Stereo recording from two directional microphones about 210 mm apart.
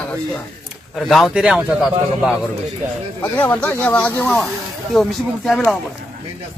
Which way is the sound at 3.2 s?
10° left (ahead or behind).